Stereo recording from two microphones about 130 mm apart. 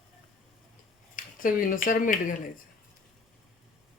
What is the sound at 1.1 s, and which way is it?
Speech, 90° left.